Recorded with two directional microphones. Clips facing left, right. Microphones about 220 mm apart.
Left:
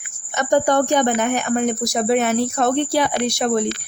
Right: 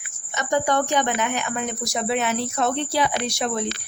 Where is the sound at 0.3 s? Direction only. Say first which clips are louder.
Left 5 dB; 45° left (ahead or behind).